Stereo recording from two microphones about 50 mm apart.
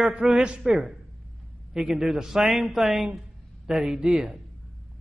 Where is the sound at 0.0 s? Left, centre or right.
Centre.